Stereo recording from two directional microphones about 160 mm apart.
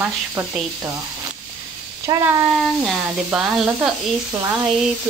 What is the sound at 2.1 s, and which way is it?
Speech, 25° right (ahead or behind).